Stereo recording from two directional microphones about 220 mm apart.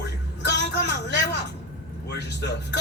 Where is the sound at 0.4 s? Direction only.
50° left (ahead or behind).